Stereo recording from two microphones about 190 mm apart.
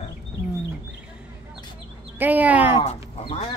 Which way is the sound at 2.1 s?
10° right (ahead or behind).